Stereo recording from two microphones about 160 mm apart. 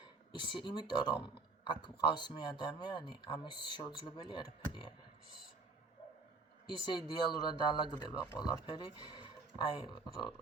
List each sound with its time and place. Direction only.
0.0 s speech: 30° left (ahead or behind)
6.7 s speech: 30° left (ahead or behind)